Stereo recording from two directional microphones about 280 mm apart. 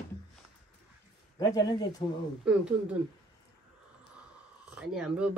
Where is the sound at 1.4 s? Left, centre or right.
Centre.